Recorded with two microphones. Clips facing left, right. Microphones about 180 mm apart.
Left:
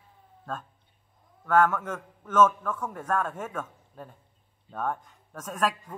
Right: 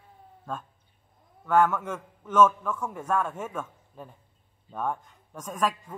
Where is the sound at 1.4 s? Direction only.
10° right (ahead or behind).